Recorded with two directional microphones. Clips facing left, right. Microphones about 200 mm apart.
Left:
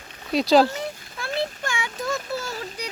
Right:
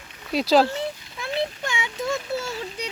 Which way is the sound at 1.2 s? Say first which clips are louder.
Right 1 dB; 20° right (ahead or behind).